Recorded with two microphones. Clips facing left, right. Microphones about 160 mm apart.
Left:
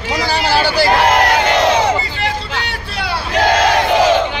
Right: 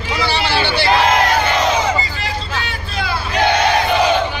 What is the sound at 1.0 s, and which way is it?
Crowd, 75° left (ahead or behind).